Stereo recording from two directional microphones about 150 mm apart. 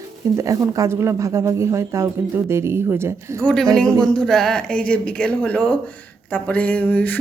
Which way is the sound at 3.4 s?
5° left (ahead or behind).